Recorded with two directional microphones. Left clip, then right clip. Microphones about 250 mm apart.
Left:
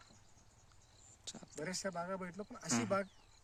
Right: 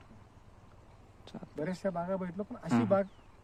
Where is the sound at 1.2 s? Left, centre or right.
Centre.